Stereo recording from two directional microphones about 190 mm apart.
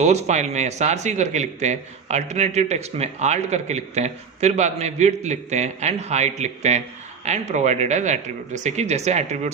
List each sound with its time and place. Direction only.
0.0 s speech: 35° right (ahead or behind)